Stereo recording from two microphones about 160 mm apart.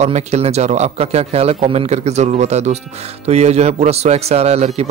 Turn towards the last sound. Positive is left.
turn(degrees=-40)  # may be behind; listen again after turning